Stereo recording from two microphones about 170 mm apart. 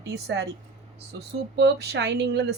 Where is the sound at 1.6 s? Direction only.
80° right.